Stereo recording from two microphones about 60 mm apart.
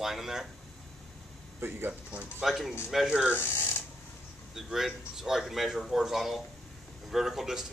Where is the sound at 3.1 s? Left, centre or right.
Centre.